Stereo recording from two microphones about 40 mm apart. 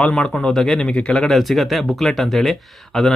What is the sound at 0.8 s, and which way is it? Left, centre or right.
Speech, left.